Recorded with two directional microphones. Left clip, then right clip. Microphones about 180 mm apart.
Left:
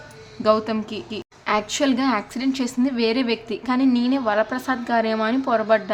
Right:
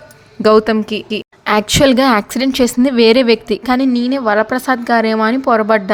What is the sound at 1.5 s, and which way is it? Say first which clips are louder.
A woman's voice: right 10 dB; 50° right (ahead or behind).